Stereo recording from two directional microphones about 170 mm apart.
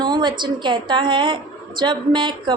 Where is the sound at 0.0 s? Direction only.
25° right (ahead or behind).